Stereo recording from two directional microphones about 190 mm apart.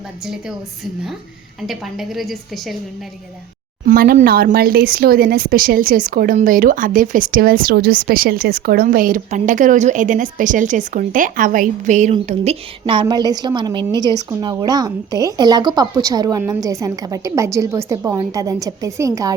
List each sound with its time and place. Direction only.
1.6 s a woman's voice: centre (ahead or behind)
3.8 s a woman's voice: 50° right (ahead or behind); by 19.4 s 20° right (ahead or behind)